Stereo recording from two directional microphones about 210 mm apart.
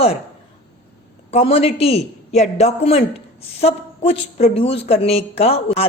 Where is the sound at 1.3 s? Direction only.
30° left (ahead or behind).